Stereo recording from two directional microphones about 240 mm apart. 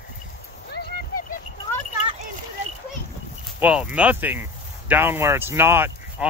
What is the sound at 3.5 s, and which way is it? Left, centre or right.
Speech, centre.